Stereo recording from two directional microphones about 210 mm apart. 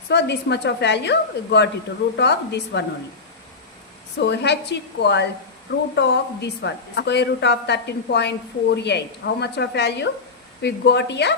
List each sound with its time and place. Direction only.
0.1 s a woman's voice: 55° left (ahead or behind)
4.2 s a woman's voice: 55° left (ahead or behind)